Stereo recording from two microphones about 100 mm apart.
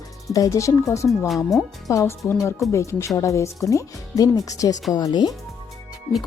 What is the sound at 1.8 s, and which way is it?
Speech, 35° left (ahead or behind).